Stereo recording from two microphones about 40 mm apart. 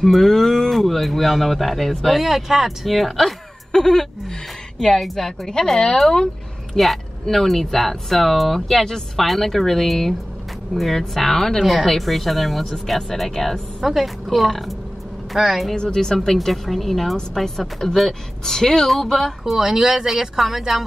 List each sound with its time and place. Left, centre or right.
0.0 s speech: centre
2.1 s a woman's voice: centre
15.7 s speech: centre
16.3 s speech: centre
19.4 s speech: centre